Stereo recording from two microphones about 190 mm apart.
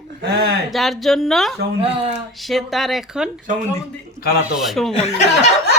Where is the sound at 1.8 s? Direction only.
30° right (ahead or behind).